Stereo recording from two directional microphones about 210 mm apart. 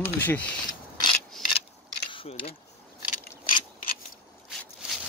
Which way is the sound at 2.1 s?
25° left (ahead or behind).